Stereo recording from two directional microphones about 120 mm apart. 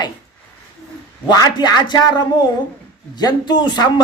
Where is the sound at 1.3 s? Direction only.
35° left (ahead or behind).